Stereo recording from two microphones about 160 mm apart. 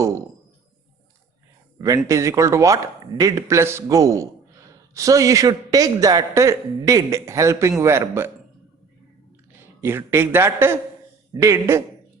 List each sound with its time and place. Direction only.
2.0 s a man's voice: 20° right (ahead or behind)
9.8 s speech: 15° right (ahead or behind)